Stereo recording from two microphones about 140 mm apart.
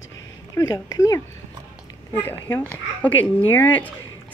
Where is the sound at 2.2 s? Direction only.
15° left (ahead or behind).